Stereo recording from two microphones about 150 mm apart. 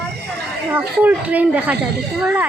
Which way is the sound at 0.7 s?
10° right (ahead or behind).